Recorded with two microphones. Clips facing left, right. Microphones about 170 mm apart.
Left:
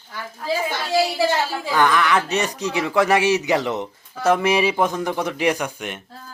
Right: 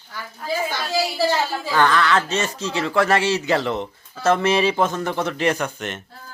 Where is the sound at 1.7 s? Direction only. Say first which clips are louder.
Even; 15° left (ahead or behind).